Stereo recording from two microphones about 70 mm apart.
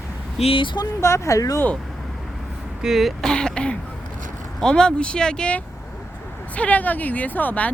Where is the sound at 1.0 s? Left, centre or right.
Left.